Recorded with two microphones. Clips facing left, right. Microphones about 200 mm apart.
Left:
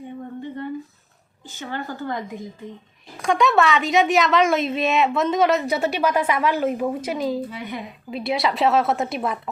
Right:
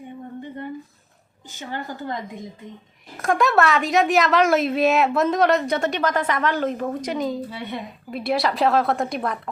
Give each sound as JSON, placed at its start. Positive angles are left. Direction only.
{"t": 1.5, "sound": "speech", "side_deg": -20}
{"t": 3.2, "sound": "a woman's voice", "side_deg": 0}
{"t": 7.5, "sound": "speech", "side_deg": -30}
{"t": 8.1, "sound": "a woman's voice", "side_deg": 0}